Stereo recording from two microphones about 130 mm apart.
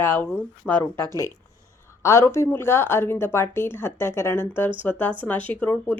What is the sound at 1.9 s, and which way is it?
Speech, 20° left (ahead or behind).